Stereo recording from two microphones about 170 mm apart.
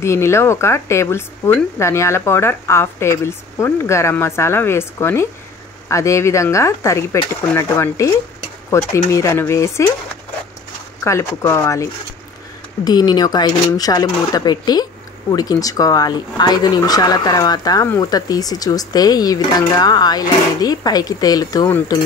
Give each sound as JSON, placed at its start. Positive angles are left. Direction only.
{"t": 0.0, "sound": "speech", "side_deg": 15}
{"t": 11.1, "sound": "speech", "side_deg": 15}